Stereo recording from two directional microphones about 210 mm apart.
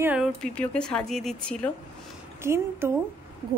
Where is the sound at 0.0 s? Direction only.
5° right (ahead or behind).